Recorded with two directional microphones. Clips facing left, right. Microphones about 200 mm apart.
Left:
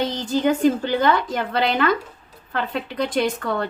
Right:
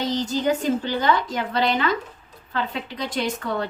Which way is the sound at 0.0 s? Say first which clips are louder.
Left 2 dB; 55° left (ahead or behind).